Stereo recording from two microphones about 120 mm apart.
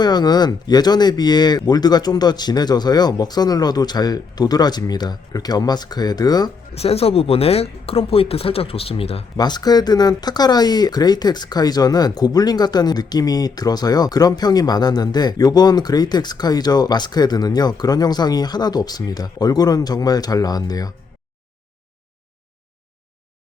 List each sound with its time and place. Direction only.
0.0 s speech: 35° left (ahead or behind)
6.7 s speech: 55° left (ahead or behind)
9.4 s speech: 35° left (ahead or behind)